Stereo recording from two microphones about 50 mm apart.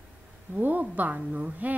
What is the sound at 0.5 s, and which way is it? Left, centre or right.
Speech, right.